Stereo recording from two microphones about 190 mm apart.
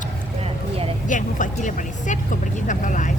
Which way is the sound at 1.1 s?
40° left (ahead or behind).